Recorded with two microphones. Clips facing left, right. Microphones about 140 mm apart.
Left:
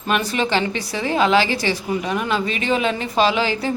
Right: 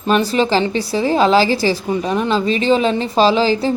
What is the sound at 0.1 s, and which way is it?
A woman's voice, 30° right (ahead or behind).